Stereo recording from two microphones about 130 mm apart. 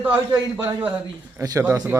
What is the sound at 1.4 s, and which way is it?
Speech, 25° right (ahead or behind).